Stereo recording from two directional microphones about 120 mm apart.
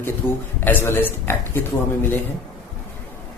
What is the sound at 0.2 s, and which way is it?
Speech, 15° left (ahead or behind).